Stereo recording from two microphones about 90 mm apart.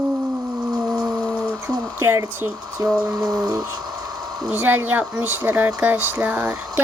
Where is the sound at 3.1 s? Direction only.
45° right (ahead or behind).